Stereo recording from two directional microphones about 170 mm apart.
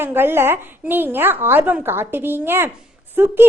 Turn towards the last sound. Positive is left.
turn(degrees=-10)  # may be behind; listen again after turning